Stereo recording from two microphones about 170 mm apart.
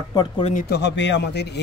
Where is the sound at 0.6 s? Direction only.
80° left.